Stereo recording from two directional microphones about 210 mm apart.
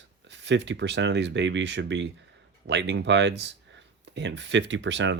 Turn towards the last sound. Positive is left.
turn(degrees=-60)  # may be behind; listen again after turning